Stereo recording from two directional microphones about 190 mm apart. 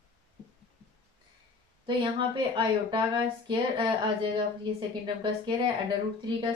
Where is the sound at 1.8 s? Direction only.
25° right (ahead or behind).